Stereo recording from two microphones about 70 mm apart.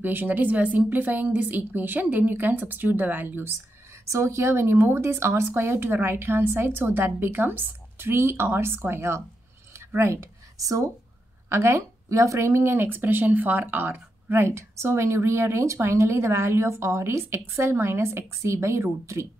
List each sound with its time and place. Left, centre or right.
0.0 s a woman's voice: right
4.1 s a woman's voice: right
9.8 s a sound: right
11.4 s a woman's voice: right